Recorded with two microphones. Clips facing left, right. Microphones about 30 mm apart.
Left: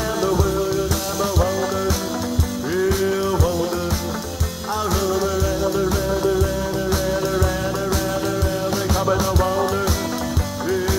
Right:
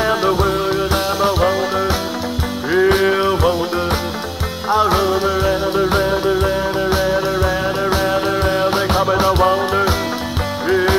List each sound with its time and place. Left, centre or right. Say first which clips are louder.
0.0 s music: right 5 dB; right
4.6 s music: right 7 dB; right